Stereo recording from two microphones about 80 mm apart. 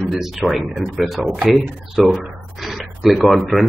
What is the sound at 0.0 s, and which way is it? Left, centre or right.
A man's voice, centre.